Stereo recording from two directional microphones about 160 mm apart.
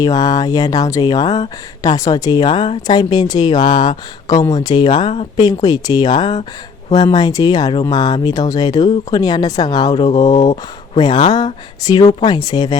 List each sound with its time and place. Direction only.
0.0 s speech: 25° left (ahead or behind)